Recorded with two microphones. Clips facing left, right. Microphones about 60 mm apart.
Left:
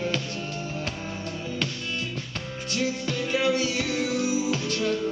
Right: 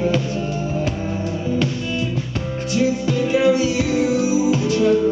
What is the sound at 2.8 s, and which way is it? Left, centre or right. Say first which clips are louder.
Music: right 9 dB; centre.